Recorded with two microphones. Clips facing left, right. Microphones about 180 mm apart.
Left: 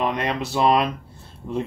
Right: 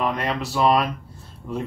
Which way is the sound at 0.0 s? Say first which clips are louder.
Left 1 dB; 20° left (ahead or behind).